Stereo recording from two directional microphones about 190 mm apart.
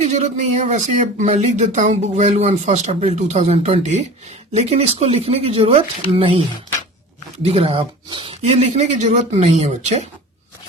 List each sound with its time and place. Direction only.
0.0 s speech: 35° right (ahead or behind)
7.4 s speech: 30° right (ahead or behind)